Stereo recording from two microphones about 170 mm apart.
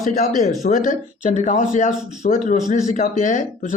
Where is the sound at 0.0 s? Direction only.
50° left (ahead or behind).